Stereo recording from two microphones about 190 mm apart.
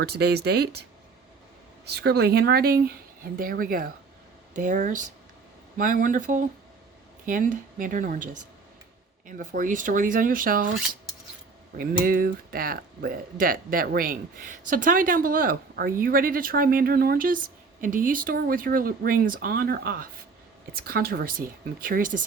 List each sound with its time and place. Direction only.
0.0 s speech: 60° right (ahead or behind)
11.8 s speech: 50° right (ahead or behind)